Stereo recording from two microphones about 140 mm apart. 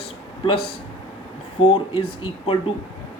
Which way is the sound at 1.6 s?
40° left (ahead or behind).